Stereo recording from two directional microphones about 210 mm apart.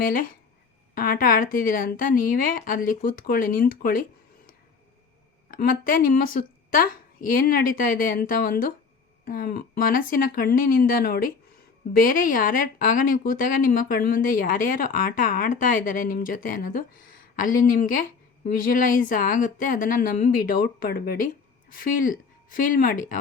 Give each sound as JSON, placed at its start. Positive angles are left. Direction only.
{"t": 0.0, "sound": "speech", "side_deg": 40}
{"t": 5.5, "sound": "a woman's voice", "side_deg": 45}